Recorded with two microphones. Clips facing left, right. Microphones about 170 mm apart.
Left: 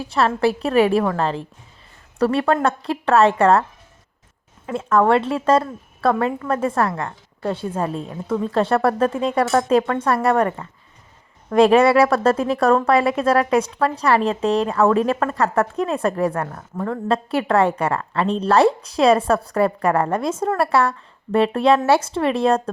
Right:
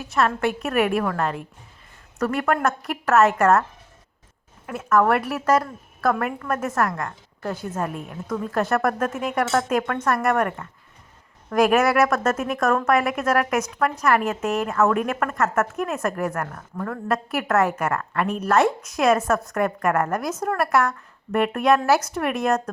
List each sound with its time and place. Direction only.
0.0 s a woman's voice: 30° left (ahead or behind)
4.6 s a woman's voice: 25° left (ahead or behind)